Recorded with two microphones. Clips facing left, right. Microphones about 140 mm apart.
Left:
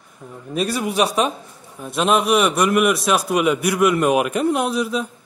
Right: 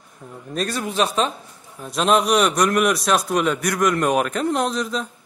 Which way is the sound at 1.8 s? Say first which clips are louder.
Even; 5° left (ahead or behind).